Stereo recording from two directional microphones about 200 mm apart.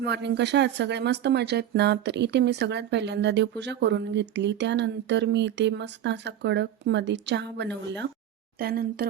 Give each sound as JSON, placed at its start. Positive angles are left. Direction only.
{"t": 0.0, "sound": "speech", "side_deg": -60}
{"t": 8.5, "sound": "a woman's voice", "side_deg": -50}